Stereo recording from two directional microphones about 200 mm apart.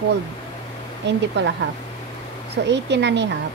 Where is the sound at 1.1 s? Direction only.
60° right (ahead or behind).